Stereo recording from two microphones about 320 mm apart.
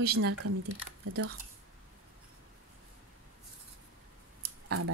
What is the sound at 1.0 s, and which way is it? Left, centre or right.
Speech, right.